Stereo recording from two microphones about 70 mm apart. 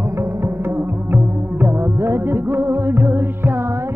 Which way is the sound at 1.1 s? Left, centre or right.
Right.